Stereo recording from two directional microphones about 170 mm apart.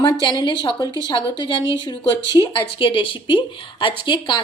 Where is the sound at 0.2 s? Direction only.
25° left (ahead or behind).